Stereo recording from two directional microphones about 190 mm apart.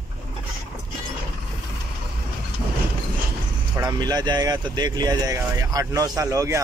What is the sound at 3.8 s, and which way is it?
Speech, 20° right (ahead or behind).